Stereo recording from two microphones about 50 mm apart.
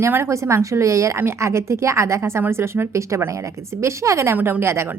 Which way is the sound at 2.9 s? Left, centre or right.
Right.